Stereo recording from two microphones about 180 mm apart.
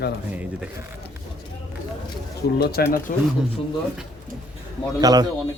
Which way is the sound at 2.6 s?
60° left (ahead or behind).